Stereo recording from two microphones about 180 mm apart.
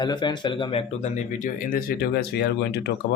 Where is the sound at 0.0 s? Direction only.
25° left (ahead or behind).